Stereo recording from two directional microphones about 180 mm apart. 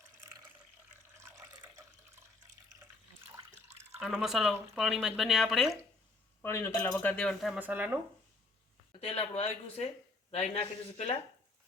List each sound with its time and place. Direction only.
4.0 s speech: centre (ahead or behind)
6.4 s speech: 15° left (ahead or behind)
7.1 s speech: 5° left (ahead or behind)
8.9 s speech: 30° left (ahead or behind)